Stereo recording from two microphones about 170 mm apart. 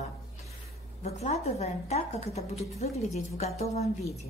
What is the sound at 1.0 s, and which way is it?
A woman's voice, 40° left (ahead or behind).